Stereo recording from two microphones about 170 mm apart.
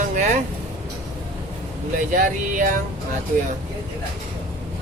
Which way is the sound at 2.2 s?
50° right (ahead or behind).